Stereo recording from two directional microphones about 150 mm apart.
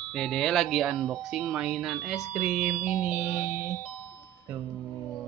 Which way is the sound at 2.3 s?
10° right (ahead or behind).